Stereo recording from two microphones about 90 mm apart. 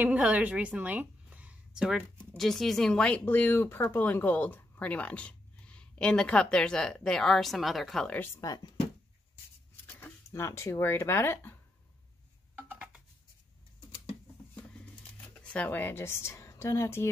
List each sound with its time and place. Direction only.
0.0 s a woman's voice: 20° right (ahead or behind)
1.8 s speech: 5° right (ahead or behind)
8.4 s speech: 50° left (ahead or behind)
10.3 s speech: 30° left (ahead or behind)
12.5 s a sound: 20° right (ahead or behind)
15.1 s speech: 15° left (ahead or behind); by 17.1 s 30° left (ahead or behind)